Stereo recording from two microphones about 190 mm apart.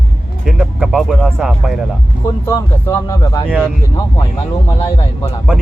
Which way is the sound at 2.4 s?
15° left (ahead or behind).